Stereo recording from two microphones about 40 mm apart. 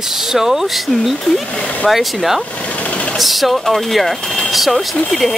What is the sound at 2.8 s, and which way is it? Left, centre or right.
Engine, left.